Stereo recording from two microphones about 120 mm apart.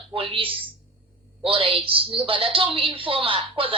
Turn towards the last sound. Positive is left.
turn(degrees=-50)  # may be behind; listen again after turning